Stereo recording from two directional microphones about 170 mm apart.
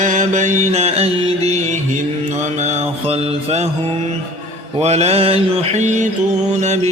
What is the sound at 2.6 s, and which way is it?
Mantra, 40° right (ahead or behind).